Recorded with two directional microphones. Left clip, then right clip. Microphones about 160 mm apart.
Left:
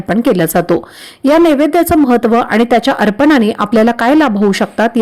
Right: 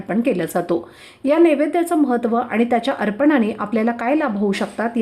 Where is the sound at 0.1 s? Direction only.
40° left (ahead or behind).